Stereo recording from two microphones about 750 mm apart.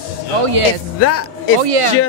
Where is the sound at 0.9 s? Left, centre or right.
Centre.